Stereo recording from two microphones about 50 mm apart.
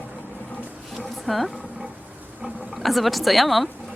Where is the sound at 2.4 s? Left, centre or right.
Right.